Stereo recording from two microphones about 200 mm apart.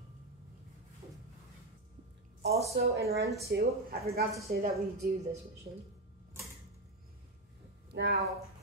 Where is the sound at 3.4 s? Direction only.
50° right (ahead or behind).